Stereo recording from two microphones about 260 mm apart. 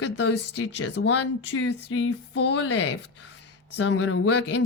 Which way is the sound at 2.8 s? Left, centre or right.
Left.